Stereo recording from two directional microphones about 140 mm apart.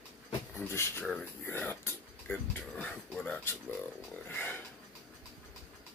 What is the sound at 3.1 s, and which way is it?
Speech, 10° left (ahead or behind).